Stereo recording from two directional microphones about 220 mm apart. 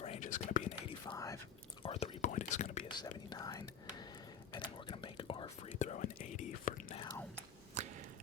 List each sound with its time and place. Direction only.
0.0 s whispering: 30° left (ahead or behind)
1.1 s whispering: 15° left (ahead or behind)
1.8 s whispering: 25° left (ahead or behind)
2.9 s whispering: 20° left (ahead or behind); by 7.0 s 35° left (ahead or behind)
7.0 s drip: 10° left (ahead or behind)
7.8 s a sound: 30° right (ahead or behind)